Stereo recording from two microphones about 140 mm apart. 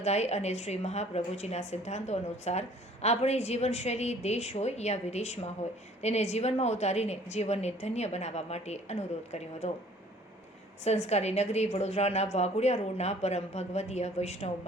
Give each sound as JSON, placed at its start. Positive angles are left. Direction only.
{"t": 0.0, "sound": "a woman's voice", "side_deg": 50}
{"t": 10.8, "sound": "a woman's voice", "side_deg": 50}